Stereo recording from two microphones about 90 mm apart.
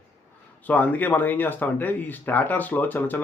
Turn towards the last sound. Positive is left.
turn(degrees=20)  # may be behind; listen again after turning